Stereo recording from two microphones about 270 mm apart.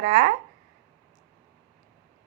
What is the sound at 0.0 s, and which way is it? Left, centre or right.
Speech, right.